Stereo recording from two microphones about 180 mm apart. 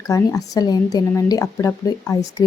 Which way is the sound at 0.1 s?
20° left (ahead or behind).